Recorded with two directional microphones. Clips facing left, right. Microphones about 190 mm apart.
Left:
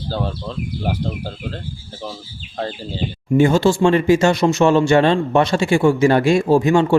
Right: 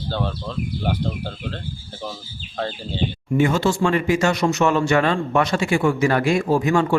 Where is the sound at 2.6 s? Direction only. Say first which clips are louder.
Left 1 dB; 5° left (ahead or behind).